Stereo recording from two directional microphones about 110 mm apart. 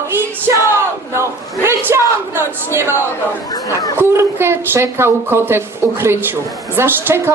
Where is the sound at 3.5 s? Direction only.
35° left (ahead or behind).